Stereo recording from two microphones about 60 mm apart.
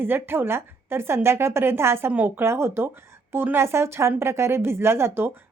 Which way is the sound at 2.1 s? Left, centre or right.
Right.